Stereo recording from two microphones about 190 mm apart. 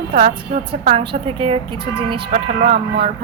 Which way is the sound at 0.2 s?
35° right (ahead or behind).